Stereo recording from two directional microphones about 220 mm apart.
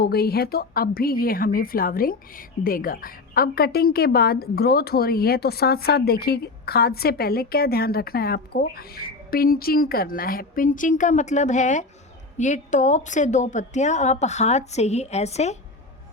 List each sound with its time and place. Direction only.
0.0 s a woman's voice: 45° left (ahead or behind); by 15.5 s 30° left (ahead or behind)